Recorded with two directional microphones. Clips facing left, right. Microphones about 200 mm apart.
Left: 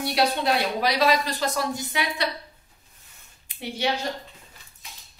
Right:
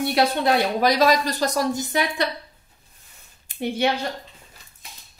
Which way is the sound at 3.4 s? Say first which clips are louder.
Right 5 dB; 50° right (ahead or behind).